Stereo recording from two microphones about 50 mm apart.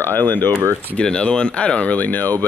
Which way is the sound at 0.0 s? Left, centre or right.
Left.